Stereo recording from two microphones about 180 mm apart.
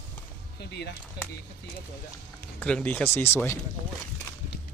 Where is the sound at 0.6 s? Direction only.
65° left (ahead or behind).